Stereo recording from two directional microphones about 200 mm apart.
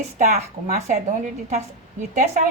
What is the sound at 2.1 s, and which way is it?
Speech, 35° right (ahead or behind).